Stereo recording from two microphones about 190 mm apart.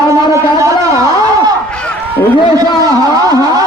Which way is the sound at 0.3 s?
15° right (ahead or behind).